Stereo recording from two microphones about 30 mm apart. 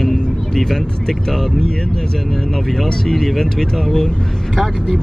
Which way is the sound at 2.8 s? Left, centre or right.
Centre.